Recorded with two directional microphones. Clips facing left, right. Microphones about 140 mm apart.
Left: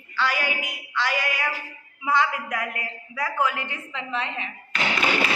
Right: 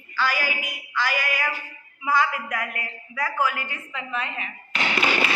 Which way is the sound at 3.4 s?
25° left (ahead or behind).